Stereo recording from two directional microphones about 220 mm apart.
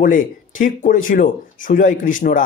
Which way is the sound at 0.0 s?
35° left (ahead or behind).